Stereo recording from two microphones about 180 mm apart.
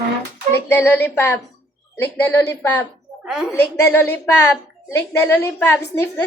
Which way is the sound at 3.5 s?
15° left (ahead or behind).